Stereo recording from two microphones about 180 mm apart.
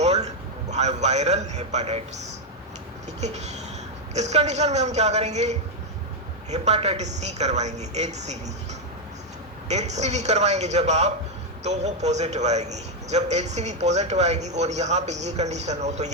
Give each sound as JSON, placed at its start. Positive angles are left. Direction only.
{"t": 0.0, "sound": "a sound", "side_deg": -40}
{"t": 0.7, "sound": "a man's voice", "side_deg": -40}
{"t": 9.6, "sound": "a man's voice", "side_deg": -40}